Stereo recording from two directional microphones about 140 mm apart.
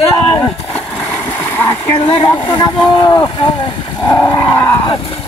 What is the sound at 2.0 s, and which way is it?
Speech, 30° left (ahead or behind).